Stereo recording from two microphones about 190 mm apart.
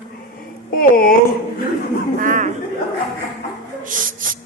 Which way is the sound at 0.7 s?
50° left (ahead or behind).